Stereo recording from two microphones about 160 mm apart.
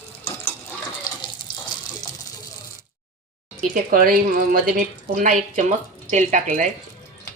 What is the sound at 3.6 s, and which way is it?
Speech, 60° right (ahead or behind).